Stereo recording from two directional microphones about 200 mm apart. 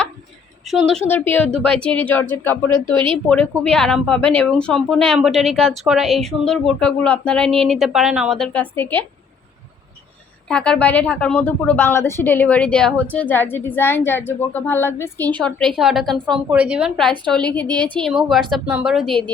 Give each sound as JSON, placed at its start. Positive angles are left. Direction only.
{"t": 0.6, "sound": "a woman's voice", "side_deg": 0}
{"t": 2.9, "sound": "a woman's voice", "side_deg": -25}
{"t": 3.2, "sound": "a woman's voice", "side_deg": 10}
{"t": 7.4, "sound": "a woman's voice", "side_deg": -30}
{"t": 7.7, "sound": "speech", "side_deg": 0}
{"t": 10.5, "sound": "a woman's voice", "side_deg": 5}
{"t": 17.7, "sound": "a woman's voice", "side_deg": -20}
{"t": 18.0, "sound": "speech", "side_deg": 0}